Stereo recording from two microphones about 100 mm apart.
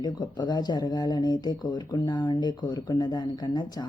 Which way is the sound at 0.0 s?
45° left (ahead or behind).